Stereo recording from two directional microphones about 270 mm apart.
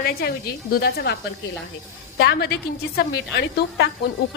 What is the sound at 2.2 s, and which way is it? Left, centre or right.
A woman's voice, left.